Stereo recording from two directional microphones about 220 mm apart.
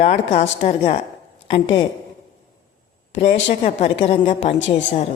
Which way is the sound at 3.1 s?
30° left (ahead or behind).